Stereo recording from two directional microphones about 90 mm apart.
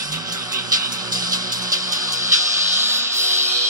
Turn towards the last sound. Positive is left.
turn(degrees=-30)  # may be behind; listen again after turning